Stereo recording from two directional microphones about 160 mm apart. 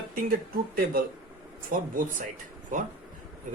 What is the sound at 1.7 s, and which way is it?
Speech, 60° right (ahead or behind).